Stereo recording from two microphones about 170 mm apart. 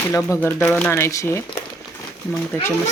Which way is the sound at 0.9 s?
15° left (ahead or behind).